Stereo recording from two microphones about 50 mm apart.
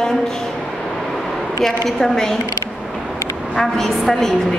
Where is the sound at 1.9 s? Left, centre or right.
Centre.